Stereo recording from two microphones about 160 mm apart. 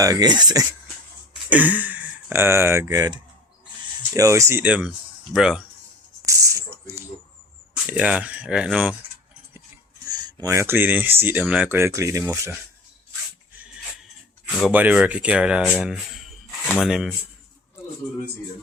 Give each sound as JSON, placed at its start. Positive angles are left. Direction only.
{"t": 0.0, "sound": "speech", "side_deg": -25}
{"t": 1.3, "sound": "speech", "side_deg": -10}
{"t": 6.2, "sound": "a sound", "side_deg": -20}
{"t": 7.9, "sound": "speech", "side_deg": -10}
{"t": 10.1, "sound": "speech", "side_deg": -25}
{"t": 14.5, "sound": "speech", "side_deg": -5}